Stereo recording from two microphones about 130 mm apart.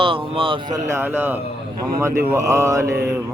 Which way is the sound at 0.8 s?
20° right (ahead or behind).